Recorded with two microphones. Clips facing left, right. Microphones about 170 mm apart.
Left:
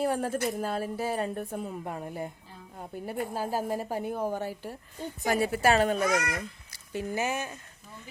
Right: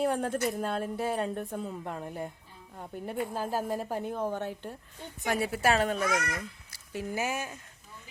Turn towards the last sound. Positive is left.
turn(degrees=-5)  # may be behind; listen again after turning